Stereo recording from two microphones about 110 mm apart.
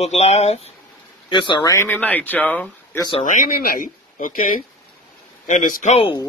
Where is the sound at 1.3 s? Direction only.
50° left (ahead or behind).